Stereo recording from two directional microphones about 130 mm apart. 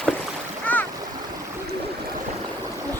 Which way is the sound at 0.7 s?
10° left (ahead or behind).